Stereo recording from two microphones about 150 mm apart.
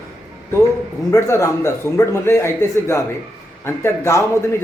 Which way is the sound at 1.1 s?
20° left (ahead or behind).